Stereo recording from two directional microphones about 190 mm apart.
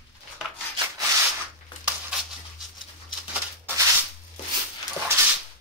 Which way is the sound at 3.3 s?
10° right (ahead or behind).